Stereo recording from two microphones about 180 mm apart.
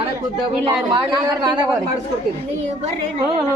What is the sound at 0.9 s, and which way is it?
Speech, 20° right (ahead or behind).